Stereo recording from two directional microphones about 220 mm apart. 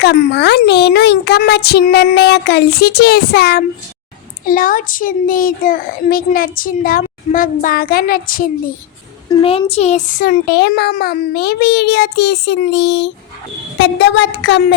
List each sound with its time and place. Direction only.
0.0 s a child's voice: 50° left (ahead or behind)
9.4 s a child's voice: 25° left (ahead or behind); by 14.8 s 50° left (ahead or behind)